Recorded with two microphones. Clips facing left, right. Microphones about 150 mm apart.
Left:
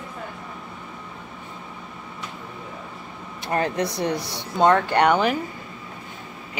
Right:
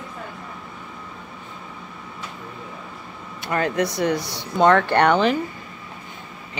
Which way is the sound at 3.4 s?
30° left (ahead or behind).